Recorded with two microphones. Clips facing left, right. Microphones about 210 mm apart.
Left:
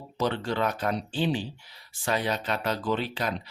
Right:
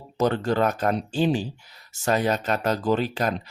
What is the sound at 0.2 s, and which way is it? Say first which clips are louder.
Speech: right 5 dB; 45° right (ahead or behind).